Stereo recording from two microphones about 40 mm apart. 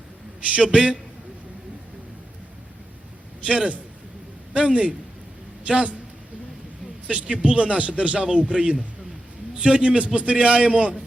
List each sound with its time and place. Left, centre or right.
0.5 s a man's voice: right
3.4 s a man's voice: right
7.1 s a man's voice: right